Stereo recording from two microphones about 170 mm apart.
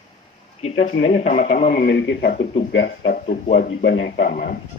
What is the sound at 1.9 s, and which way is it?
A man's voice, 90° left.